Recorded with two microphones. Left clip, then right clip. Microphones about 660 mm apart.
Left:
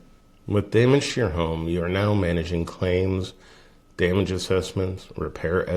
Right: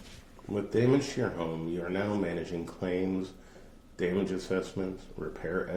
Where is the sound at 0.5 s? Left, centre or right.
Left.